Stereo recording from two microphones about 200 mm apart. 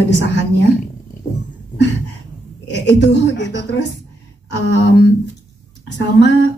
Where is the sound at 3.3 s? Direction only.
60° left (ahead or behind).